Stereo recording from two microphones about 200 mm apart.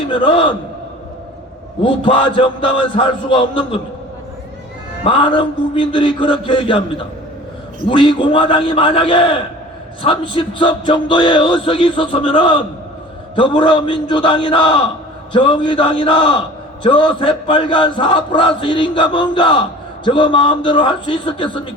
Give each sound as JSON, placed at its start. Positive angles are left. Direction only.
{"t": 0.1, "sound": "a man's voice", "side_deg": 25}
{"t": 1.8, "sound": "a man's voice", "side_deg": 25}
{"t": 5.0, "sound": "a man's voice", "side_deg": 25}